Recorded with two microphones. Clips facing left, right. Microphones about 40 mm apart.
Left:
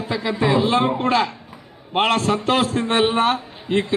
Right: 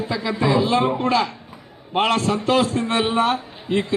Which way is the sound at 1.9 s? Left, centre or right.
Left.